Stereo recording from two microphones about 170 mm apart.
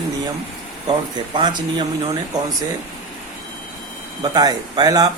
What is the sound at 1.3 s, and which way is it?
Speech, 25° right (ahead or behind).